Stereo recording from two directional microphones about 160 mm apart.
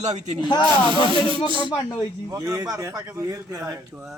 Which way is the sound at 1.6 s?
30° left (ahead or behind).